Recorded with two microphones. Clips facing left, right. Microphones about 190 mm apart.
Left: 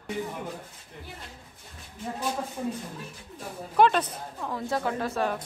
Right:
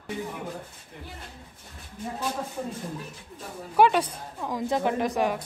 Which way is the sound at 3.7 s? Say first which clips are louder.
Right 1 dB; 10° right (ahead or behind).